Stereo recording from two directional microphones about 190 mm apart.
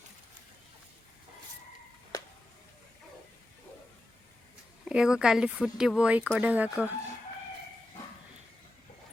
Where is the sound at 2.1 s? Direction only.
20° left (ahead or behind).